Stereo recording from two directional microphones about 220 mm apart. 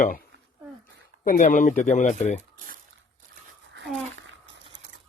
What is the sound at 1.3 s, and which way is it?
Speech, 35° left (ahead or behind).